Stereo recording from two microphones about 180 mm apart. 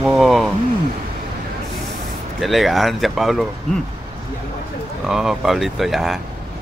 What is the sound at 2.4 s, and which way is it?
Speech, centre (ahead or behind).